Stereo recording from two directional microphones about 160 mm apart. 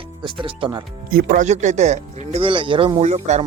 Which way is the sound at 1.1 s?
65° right (ahead or behind).